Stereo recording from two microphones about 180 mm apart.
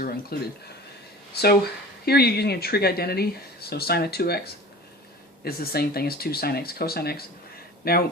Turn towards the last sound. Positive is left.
turn(degrees=60)  # may be behind; listen again after turning